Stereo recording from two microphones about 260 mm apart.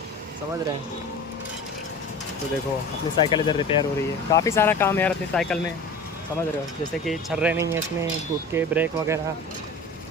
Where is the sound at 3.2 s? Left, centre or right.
Centre.